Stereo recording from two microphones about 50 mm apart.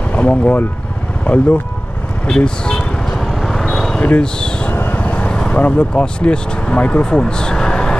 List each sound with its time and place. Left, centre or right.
0.1 s speech: left
3.1 s vehicle: centre
4.0 s speech: centre
4.7 s vehicle: left
5.1 s vehicle: centre
5.5 s speech: left